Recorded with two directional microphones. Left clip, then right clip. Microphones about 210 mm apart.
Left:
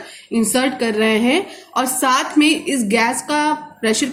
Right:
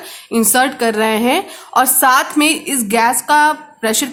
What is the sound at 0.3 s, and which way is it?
A woman's voice, 45° right (ahead or behind).